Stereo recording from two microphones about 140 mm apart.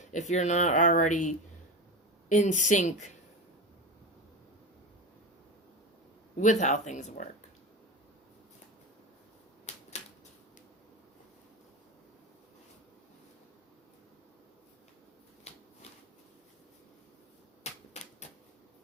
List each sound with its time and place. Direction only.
0.0 s speech: 55° left (ahead or behind)
6.3 s speech: 60° left (ahead or behind)
9.7 s typewriter: 55° left (ahead or behind)
17.6 s typewriter: 55° left (ahead or behind)